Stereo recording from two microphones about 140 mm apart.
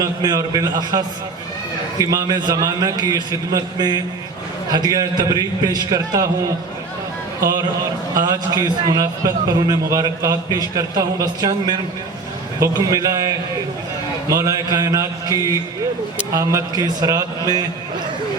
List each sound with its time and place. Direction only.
0.0 s a man's voice: 25° right (ahead or behind)
8.1 s a man's voice: 30° right (ahead or behind)